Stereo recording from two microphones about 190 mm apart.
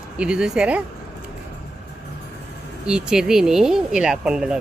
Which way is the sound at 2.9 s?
5° right (ahead or behind).